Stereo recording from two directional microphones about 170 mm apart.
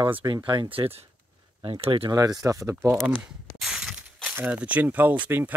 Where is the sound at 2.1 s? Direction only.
20° right (ahead or behind).